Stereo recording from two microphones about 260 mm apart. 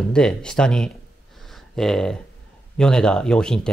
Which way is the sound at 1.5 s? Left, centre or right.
Centre.